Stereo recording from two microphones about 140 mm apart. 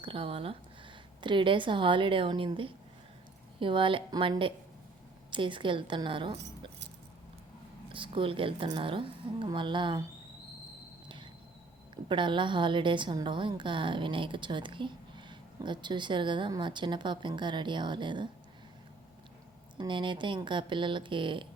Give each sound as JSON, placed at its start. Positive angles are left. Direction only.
{"t": 0.0, "sound": "a woman's voice", "side_deg": -40}
{"t": 7.9, "sound": "a woman's voice", "side_deg": -35}
{"t": 12.0, "sound": "a woman's voice", "side_deg": -35}
{"t": 19.8, "sound": "a woman's voice", "side_deg": -35}